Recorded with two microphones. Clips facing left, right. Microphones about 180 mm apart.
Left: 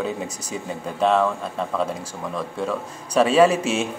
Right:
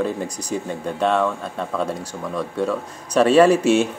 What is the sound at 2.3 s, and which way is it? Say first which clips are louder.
Speech: right 4 dB; 5° left (ahead or behind).